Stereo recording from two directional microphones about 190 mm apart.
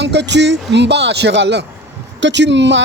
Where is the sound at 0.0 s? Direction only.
65° right (ahead or behind).